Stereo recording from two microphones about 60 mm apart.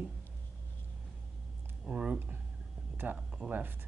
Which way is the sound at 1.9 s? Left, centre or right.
Right.